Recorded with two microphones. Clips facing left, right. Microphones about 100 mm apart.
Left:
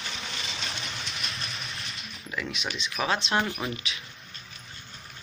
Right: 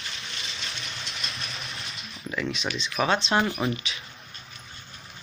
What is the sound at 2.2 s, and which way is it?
Speech, centre (ahead or behind).